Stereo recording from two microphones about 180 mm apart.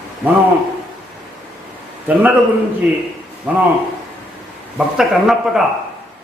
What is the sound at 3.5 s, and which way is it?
Speech, 10° right (ahead or behind).